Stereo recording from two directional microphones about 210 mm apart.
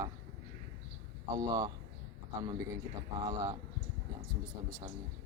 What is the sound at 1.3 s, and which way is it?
Speech, 15° right (ahead or behind).